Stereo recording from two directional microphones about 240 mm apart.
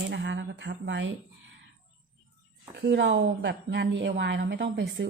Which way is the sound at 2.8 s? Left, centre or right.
Right.